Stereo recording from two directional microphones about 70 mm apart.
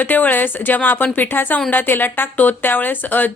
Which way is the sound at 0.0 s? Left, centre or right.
Left.